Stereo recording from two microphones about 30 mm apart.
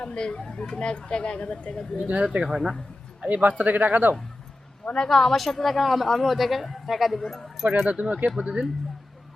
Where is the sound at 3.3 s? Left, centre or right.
Right.